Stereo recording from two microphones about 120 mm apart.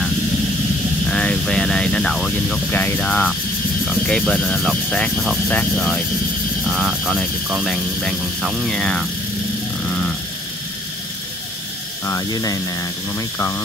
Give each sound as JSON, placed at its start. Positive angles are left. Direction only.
{"t": 1.0, "sound": "a sound", "side_deg": 5}
{"t": 2.7, "sound": "speech", "side_deg": 15}
{"t": 6.6, "sound": "speech", "side_deg": -5}
{"t": 8.6, "sound": "speech", "side_deg": 5}
{"t": 9.8, "sound": "vehicle", "side_deg": 5}
{"t": 12.1, "sound": "speech", "side_deg": 30}